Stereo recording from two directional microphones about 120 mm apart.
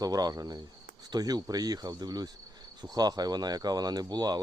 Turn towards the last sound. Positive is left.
turn(degrees=-35)  # may be behind; listen again after turning